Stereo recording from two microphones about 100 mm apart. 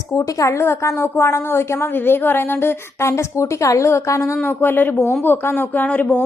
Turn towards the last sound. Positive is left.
turn(degrees=15)  # may be behind; listen again after turning